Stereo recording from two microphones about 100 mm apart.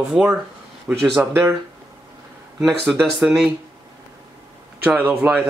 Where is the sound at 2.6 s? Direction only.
5° right (ahead or behind).